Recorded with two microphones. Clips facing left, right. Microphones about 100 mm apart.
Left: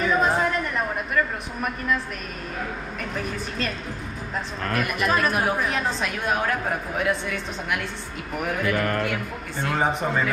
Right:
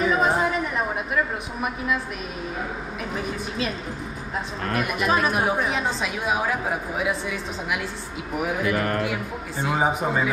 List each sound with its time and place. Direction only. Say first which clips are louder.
0.0 s a sound: even; centre (ahead or behind)
3.2 s a woman's voice: right 1 dB; 5° right (ahead or behind)
4.7 s a woman's voice: right 1 dB; centre (ahead or behind)
8.7 s speech: even; 30° right (ahead or behind)
9.0 s a woman's voice: even; 5° right (ahead or behind)